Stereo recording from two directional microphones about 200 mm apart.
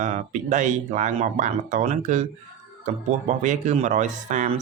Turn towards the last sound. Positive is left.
turn(degrees=-35)  # may be behind; listen again after turning